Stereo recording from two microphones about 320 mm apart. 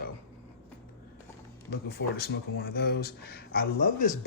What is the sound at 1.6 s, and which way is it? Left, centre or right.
Speech, left.